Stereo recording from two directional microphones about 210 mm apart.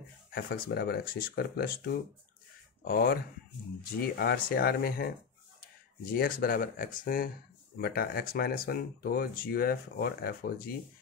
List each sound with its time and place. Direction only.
0.3 s speech: 45° left (ahead or behind)
2.9 s speech: 45° left (ahead or behind)
6.1 s speech: 45° left (ahead or behind)